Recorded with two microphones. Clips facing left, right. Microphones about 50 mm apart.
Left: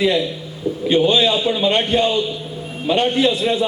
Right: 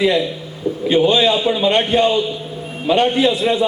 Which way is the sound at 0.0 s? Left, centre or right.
Centre.